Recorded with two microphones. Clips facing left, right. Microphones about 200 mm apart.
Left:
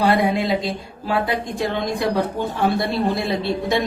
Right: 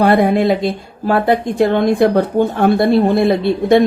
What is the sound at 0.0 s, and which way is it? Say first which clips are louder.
Speech: right 6 dB; 55° right (ahead or behind).